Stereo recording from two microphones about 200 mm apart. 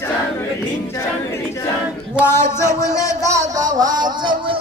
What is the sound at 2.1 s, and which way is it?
Speech, 10° left (ahead or behind).